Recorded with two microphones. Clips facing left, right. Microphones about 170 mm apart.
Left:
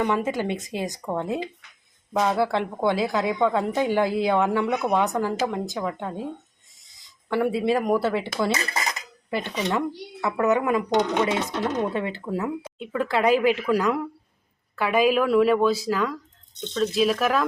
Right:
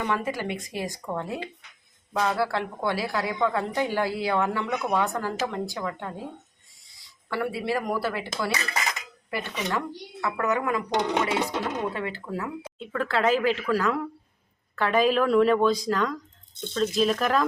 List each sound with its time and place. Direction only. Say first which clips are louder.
0.1 s a woman's voice: left 4 dB; 20° left (ahead or behind)
7.3 s speech: left 6 dB; 20° left (ahead or behind)
8.5 s dishes: left 2 dB; 35° left (ahead or behind)
9.3 s a woman's voice: left 4 dB; 20° left (ahead or behind); by 16.2 s 5° left (ahead or behind)
16.6 s a woman's voice: left 2 dB; 5° right (ahead or behind)